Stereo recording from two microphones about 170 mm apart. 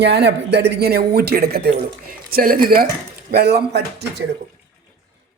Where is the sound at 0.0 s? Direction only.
75° right (ahead or behind); by 2.8 s 60° right (ahead or behind).